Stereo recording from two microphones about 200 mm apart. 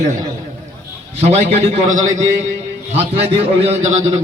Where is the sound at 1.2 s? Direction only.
30° right (ahead or behind).